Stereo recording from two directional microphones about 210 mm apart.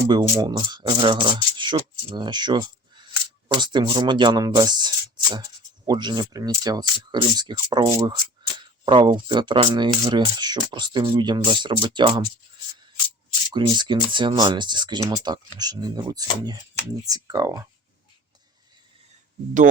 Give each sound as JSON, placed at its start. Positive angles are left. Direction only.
{"t": 0.1, "sound": "speech", "side_deg": -20}
{"t": 13.5, "sound": "speech", "side_deg": -20}